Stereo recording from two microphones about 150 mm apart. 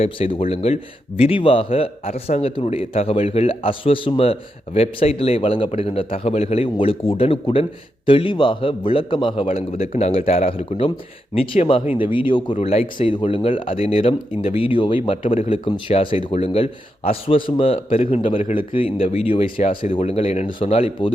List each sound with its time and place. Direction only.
0.0 s speech: 35° left (ahead or behind)
9.5 s speech: 45° left (ahead or behind)